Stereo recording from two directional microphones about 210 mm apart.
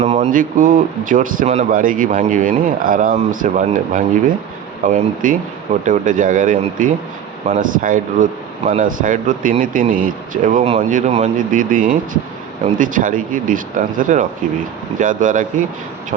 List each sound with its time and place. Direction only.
0.0 s speech: 30° right (ahead or behind)